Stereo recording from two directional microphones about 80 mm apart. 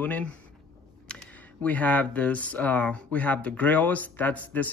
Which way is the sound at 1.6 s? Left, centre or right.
Centre.